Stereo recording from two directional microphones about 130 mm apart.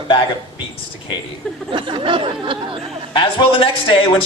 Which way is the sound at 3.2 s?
40° left (ahead or behind).